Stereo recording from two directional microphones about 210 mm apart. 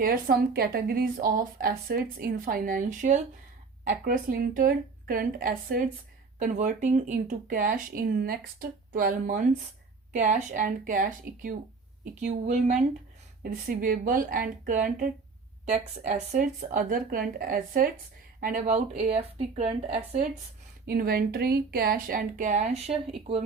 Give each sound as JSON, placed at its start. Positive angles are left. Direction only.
{"t": 0.0, "sound": "speech", "side_deg": -45}
{"t": 13.4, "sound": "speech", "side_deg": -45}
{"t": 20.8, "sound": "speech", "side_deg": -45}